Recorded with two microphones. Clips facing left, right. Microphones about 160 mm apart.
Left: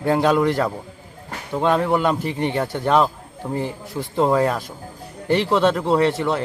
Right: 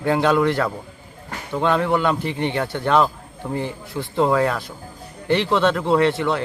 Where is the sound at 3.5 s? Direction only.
35° left (ahead or behind).